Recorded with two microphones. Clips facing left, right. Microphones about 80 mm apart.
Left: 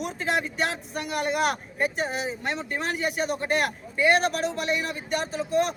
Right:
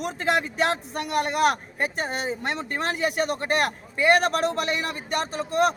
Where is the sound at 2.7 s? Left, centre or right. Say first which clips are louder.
Right 4 dB; right.